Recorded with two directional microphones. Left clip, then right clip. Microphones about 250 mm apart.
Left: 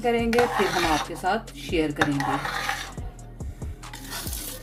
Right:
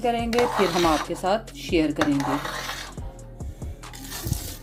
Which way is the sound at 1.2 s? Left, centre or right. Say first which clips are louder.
Right 2 dB; right.